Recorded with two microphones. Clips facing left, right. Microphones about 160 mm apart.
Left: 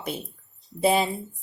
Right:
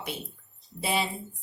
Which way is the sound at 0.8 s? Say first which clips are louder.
Left 8 dB; 45° left (ahead or behind).